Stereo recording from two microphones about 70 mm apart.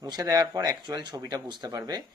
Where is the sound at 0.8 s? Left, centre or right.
Right.